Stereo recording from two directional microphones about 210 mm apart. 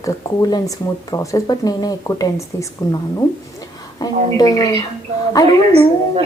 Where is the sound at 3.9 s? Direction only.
20° left (ahead or behind).